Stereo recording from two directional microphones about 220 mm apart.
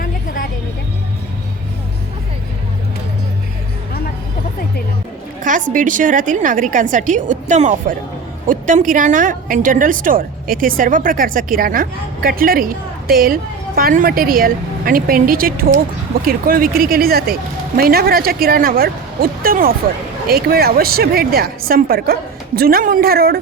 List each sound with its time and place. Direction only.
5.4 s a woman's voice: 35° right (ahead or behind)